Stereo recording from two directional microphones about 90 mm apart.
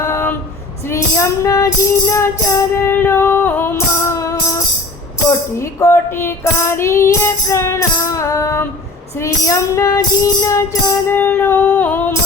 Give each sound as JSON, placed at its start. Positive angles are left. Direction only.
{"t": 0.0, "sound": "female singing", "side_deg": 35}
{"t": 0.9, "sound": "music", "side_deg": 35}
{"t": 11.1, "sound": "female singing", "side_deg": 20}